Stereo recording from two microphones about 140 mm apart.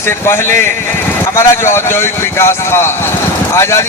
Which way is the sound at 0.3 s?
15° left (ahead or behind).